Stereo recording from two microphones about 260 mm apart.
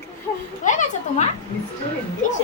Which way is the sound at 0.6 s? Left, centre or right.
Left.